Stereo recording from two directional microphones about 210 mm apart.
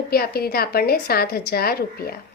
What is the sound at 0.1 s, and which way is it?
A woman's voice, 45° left (ahead or behind).